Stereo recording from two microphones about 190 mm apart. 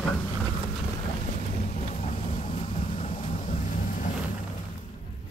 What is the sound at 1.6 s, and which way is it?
Vehicle, 40° left (ahead or behind).